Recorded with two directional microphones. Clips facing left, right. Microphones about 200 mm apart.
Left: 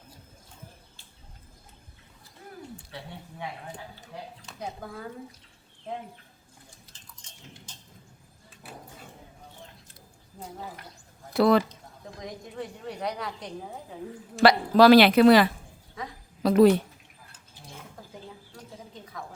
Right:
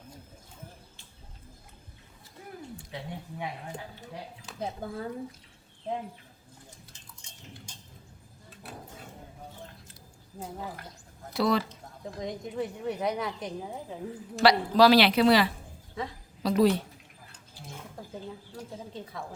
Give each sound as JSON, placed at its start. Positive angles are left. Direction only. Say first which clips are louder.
{"t": 7.2, "sound": "a sound", "louder": "right 1 dB", "side_deg": -10}
{"t": 11.3, "sound": "speech", "louder": "left 6 dB", "side_deg": 55}
{"t": 12.2, "sound": "a woman's voice", "louder": "right 4 dB", "side_deg": -20}
{"t": 14.4, "sound": "speech", "louder": "left 3 dB", "side_deg": 50}